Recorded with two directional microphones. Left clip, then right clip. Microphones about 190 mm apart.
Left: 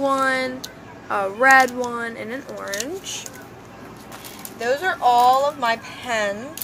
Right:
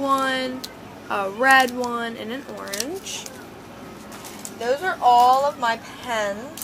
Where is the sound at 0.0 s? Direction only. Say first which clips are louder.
Left 2 dB; centre (ahead or behind).